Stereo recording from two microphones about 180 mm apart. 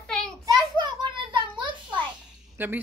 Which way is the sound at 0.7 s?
25° right (ahead or behind).